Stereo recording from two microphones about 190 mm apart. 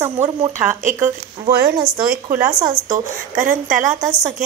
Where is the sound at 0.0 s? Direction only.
15° right (ahead or behind).